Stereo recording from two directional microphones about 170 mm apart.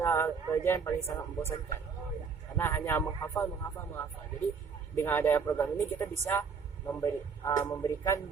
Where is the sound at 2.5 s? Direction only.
15° left (ahead or behind).